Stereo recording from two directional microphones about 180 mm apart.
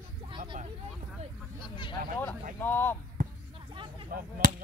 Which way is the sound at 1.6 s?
25° left (ahead or behind).